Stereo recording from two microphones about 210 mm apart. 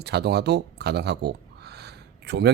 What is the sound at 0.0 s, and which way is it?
Speech, 50° right (ahead or behind).